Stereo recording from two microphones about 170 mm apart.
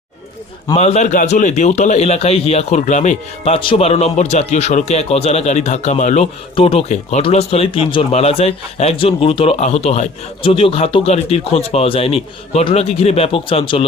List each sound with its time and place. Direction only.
0.8 s speech: 40° left (ahead or behind)